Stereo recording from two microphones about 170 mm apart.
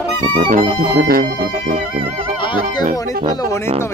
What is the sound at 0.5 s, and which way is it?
Speech, 60° right (ahead or behind).